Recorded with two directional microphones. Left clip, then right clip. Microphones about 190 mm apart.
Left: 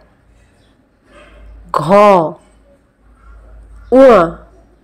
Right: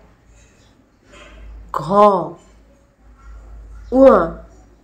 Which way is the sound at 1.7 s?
35° left (ahead or behind).